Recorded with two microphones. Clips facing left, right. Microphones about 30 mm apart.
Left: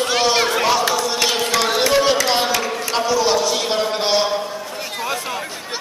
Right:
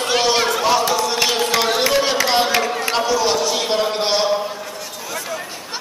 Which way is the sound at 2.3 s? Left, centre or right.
Centre.